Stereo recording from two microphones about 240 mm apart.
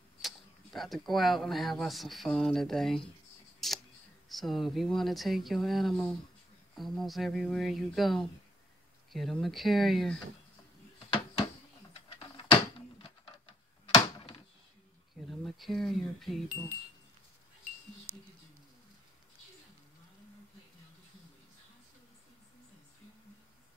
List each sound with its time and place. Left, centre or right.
0.2 s speech: centre
3.6 s camera: centre
4.3 s speech: centre
11.1 s a sound: left
13.9 s a sound: left
15.2 s speech: centre